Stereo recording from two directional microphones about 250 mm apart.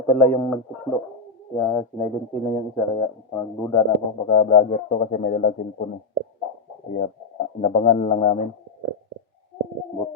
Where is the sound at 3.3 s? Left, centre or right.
Centre.